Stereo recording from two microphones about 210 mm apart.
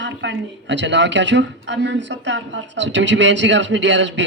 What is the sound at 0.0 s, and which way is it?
A woman's voice, 60° right (ahead or behind).